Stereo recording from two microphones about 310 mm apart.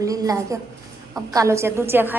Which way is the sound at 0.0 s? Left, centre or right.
Centre.